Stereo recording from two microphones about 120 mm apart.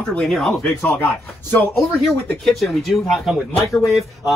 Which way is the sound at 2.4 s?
Centre (ahead or behind).